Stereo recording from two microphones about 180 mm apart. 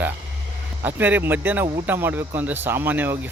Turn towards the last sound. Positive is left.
turn(degrees=-10)  # may be behind; listen again after turning